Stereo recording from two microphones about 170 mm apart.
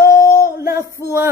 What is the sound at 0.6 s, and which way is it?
Music, 60° left (ahead or behind).